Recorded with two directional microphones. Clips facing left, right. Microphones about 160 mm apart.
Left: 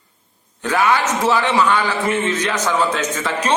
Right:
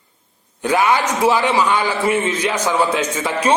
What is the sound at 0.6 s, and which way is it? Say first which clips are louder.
A man's voice: right 1 dB; 10° right (ahead or behind).